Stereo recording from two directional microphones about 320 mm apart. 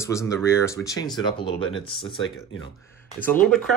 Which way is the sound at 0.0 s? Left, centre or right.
Centre.